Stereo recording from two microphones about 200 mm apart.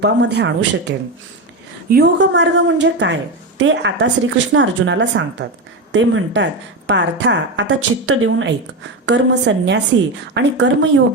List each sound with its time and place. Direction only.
0.0 s a woman's voice: 60° right (ahead or behind); by 8.5 s 80° right
9.0 s a woman's voice: 60° right (ahead or behind)